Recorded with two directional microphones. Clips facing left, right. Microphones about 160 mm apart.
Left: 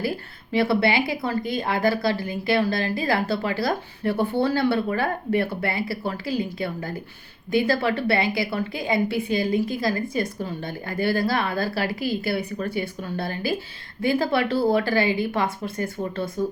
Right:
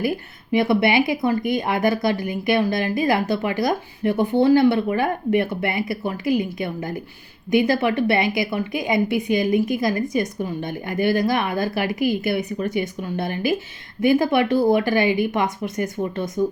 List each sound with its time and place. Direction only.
0.5 s a woman's voice: 20° right (ahead or behind)